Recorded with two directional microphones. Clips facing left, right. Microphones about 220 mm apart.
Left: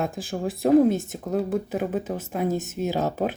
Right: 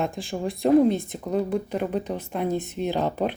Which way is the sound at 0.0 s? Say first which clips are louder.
Even; centre (ahead or behind).